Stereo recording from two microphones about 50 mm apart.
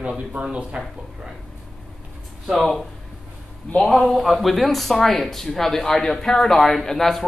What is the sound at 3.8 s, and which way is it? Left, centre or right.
Speech, centre.